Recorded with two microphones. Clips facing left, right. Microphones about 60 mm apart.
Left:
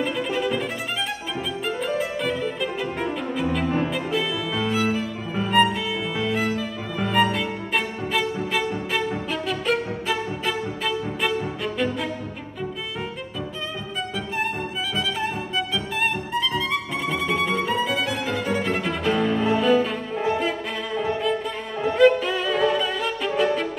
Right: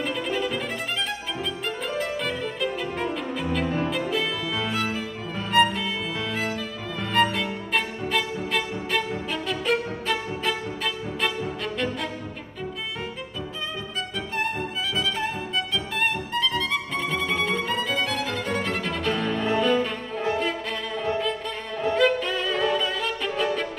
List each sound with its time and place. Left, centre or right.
0.0 s violin: centre
2.0 s music: centre
15.0 s violin: centre